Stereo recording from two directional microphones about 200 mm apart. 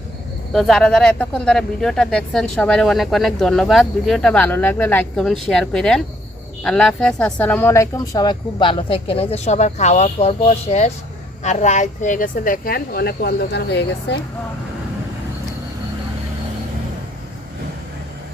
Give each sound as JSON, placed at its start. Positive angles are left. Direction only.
{"t": 0.5, "sound": "a woman's voice", "side_deg": 0}